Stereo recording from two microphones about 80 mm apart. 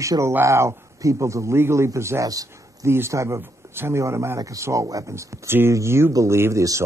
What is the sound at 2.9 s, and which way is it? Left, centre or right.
Speech, right.